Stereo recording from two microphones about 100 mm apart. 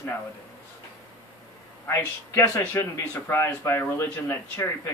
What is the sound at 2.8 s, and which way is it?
Speech, 25° left (ahead or behind).